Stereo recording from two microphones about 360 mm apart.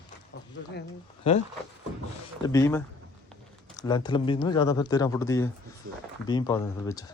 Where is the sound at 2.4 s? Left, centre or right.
Centre.